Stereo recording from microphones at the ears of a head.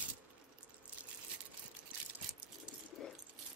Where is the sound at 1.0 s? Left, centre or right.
Right.